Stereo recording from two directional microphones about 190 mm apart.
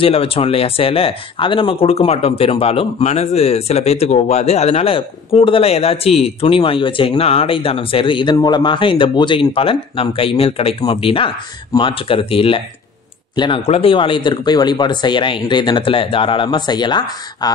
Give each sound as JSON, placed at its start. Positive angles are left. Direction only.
{"t": 0.0, "sound": "speech", "side_deg": 30}